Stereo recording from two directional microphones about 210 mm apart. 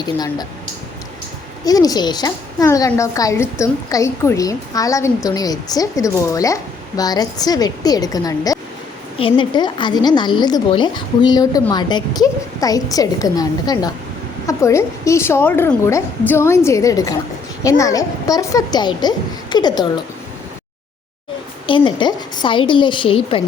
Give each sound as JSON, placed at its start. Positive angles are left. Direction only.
{"t": 0.0, "sound": "a woman's voice", "side_deg": 20}
{"t": 1.6, "sound": "a woman's voice", "side_deg": 15}
{"t": 21.7, "sound": "a woman's voice", "side_deg": 20}